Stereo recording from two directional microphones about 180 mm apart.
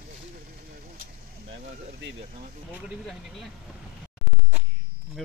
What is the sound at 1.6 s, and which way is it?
Speech, 45° right (ahead or behind).